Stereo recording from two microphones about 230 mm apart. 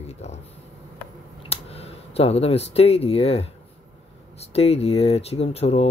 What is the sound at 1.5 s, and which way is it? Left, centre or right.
Speech, left.